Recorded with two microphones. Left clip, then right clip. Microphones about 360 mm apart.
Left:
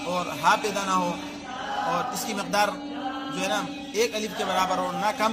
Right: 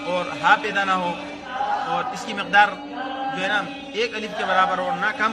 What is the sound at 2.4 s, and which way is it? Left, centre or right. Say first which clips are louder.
Speech: right 8 dB; centre.